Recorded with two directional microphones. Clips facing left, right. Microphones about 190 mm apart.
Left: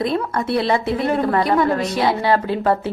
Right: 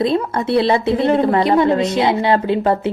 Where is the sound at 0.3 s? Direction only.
25° right (ahead or behind).